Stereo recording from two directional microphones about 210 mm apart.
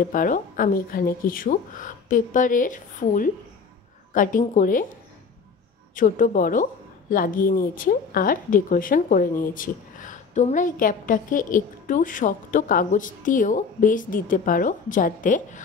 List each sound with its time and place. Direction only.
0.1 s a woman's voice: 40° left (ahead or behind)
5.9 s a woman's voice: 40° left (ahead or behind)